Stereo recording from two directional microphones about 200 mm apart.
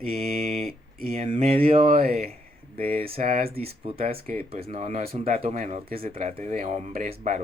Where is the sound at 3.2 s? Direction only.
40° right (ahead or behind).